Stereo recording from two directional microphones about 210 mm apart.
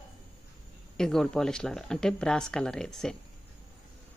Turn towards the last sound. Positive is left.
turn(degrees=5)  # may be behind; listen again after turning